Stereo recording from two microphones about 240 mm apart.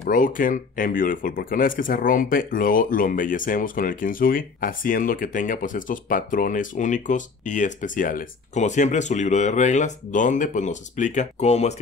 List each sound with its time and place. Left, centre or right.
0.0 s speech: left